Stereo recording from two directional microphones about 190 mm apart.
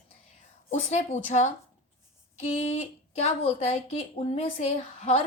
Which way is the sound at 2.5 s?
30° left (ahead or behind).